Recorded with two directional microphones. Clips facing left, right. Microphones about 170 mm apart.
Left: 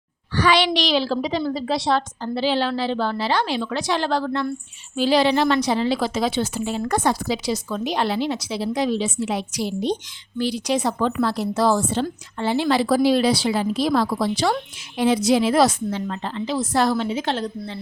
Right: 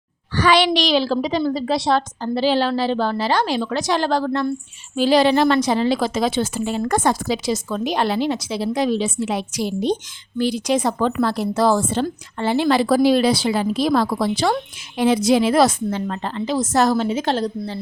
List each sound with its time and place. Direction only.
0.3 s a woman's voice: 45° right (ahead or behind)